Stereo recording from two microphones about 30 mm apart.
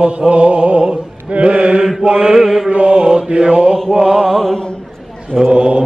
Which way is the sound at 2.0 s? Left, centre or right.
Right.